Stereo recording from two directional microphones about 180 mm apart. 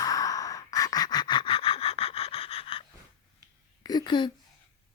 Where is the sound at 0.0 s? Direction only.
20° left (ahead or behind).